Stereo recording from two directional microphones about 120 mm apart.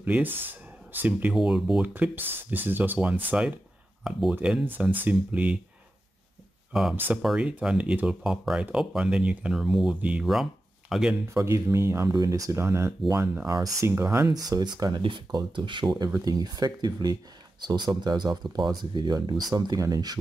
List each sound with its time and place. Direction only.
0.0 s speech: 15° right (ahead or behind)
1.3 s speech: 5° right (ahead or behind)
6.7 s speech: 5° right (ahead or behind)
7.0 s speech: 15° right (ahead or behind)
11.3 s speech: 25° right (ahead or behind)